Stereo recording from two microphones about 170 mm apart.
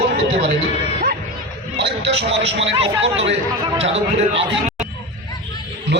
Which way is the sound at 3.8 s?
35° right (ahead or behind).